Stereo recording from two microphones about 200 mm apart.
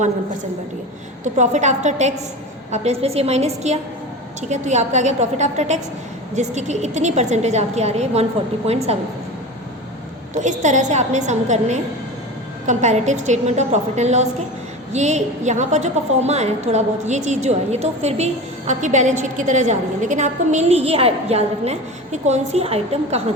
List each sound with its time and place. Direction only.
1.2 s a woman's voice: 35° right (ahead or behind)
10.3 s a woman's voice: 40° right (ahead or behind)